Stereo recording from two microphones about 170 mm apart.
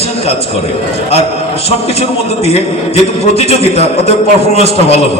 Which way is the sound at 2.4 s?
35° left (ahead or behind).